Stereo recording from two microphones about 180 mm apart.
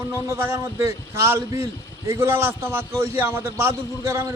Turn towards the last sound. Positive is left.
turn(degrees=-15)  # may be behind; listen again after turning